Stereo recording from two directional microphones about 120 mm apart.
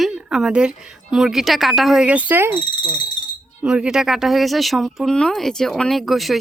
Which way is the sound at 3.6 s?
5° right (ahead or behind).